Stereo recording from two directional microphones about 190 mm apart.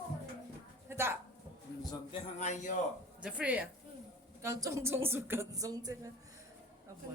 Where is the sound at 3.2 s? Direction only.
5° right (ahead or behind).